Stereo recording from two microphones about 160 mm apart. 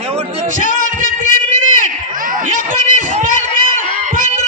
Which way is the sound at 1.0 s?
50° left (ahead or behind).